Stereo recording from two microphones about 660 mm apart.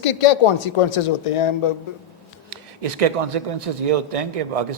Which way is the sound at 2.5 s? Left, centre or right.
Right.